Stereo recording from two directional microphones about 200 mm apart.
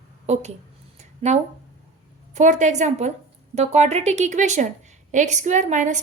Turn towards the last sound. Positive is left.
turn(degrees=-40)  # may be behind; listen again after turning